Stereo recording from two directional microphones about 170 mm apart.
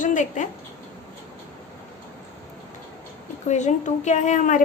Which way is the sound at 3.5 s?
45° left (ahead or behind).